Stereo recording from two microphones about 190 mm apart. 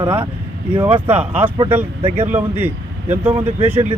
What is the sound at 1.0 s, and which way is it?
Speech, 10° right (ahead or behind).